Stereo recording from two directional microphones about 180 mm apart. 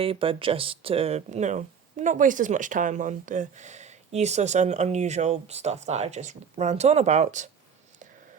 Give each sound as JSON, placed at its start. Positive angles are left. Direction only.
{"t": 0.0, "sound": "speech", "side_deg": -30}